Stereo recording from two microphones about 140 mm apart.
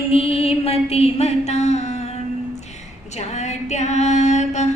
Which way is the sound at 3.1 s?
55° left (ahead or behind).